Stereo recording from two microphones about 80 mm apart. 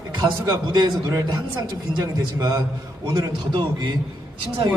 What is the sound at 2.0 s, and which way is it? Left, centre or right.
A man's voice, right.